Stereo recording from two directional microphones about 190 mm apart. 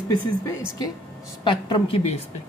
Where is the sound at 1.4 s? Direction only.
25° left (ahead or behind).